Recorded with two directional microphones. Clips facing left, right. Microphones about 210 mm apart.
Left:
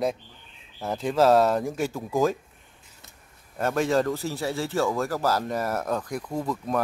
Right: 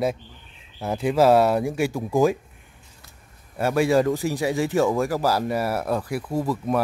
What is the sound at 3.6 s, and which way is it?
A man's voice, 10° right (ahead or behind).